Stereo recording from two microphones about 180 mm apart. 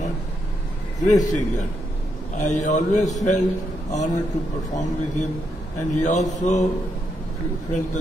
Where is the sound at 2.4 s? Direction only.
40° left (ahead or behind).